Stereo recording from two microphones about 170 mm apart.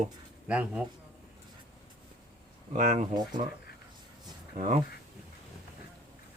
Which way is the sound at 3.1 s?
25° right (ahead or behind).